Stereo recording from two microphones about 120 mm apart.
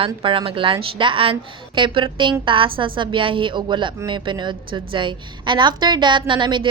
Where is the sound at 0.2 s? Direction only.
45° right (ahead or behind).